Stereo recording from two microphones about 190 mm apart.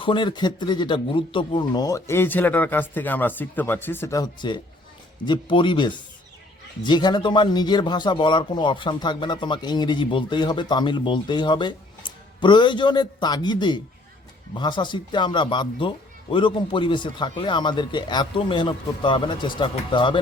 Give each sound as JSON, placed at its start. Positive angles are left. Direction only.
{"t": 0.0, "sound": "a man's voice", "side_deg": 25}